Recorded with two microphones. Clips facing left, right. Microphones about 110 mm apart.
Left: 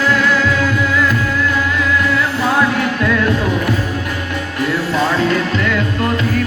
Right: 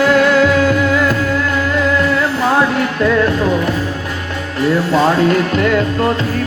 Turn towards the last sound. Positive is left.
turn(degrees=-45)  # may be behind; listen again after turning